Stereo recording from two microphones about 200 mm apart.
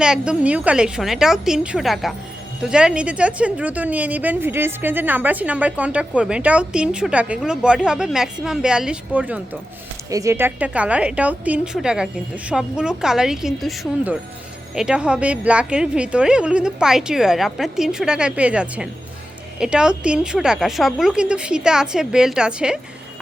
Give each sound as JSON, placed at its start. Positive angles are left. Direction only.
{"t": 0.0, "sound": "a woman's voice", "side_deg": -5}